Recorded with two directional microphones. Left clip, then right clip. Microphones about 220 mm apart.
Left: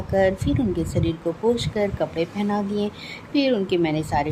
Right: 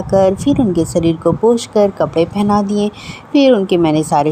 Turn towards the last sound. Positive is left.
turn(degrees=-25)  # may be behind; listen again after turning